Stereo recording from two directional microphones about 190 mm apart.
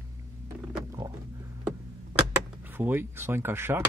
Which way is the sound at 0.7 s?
15° right (ahead or behind).